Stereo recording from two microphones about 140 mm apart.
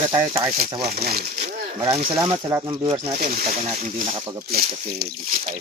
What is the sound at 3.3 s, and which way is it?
Speech, 70° right (ahead or behind).